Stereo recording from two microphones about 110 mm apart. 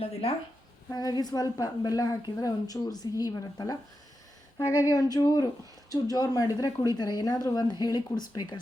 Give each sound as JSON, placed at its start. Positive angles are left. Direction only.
{"t": 0.0, "sound": "speech", "side_deg": 65}
{"t": 0.9, "sound": "a woman's voice", "side_deg": 35}
{"t": 4.9, "sound": "a woman's voice", "side_deg": 35}